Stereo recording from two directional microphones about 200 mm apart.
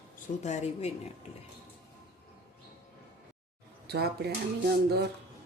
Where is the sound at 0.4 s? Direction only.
35° left (ahead or behind).